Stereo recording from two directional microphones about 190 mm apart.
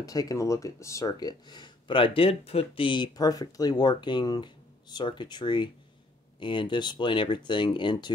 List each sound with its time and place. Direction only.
0.0 s speech: 20° left (ahead or behind)